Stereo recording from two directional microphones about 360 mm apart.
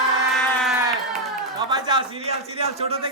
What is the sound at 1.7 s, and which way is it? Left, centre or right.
A man's voice, centre.